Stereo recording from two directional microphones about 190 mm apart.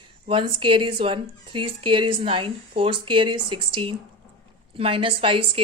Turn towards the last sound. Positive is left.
turn(degrees=-30)  # may be behind; listen again after turning